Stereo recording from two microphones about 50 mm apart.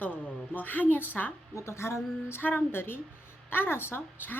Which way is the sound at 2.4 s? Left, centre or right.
Left.